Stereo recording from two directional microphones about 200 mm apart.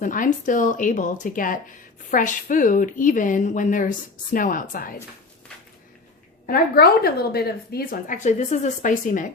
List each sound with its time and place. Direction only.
0.0 s a woman's voice: 40° left (ahead or behind)
6.4 s a woman's voice: 50° left (ahead or behind)